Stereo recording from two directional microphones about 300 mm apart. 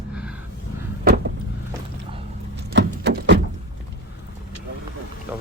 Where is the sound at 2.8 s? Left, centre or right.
Right.